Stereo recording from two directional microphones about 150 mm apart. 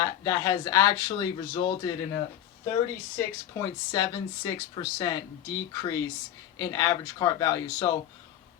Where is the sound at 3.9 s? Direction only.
25° left (ahead or behind).